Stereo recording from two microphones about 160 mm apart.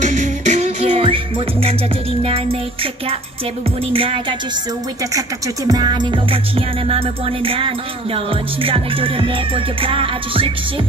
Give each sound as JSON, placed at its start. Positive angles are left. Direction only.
{"t": 0.0, "sound": "music", "side_deg": -50}
{"t": 5.7, "sound": "music", "side_deg": -25}
{"t": 7.4, "sound": "music", "side_deg": -35}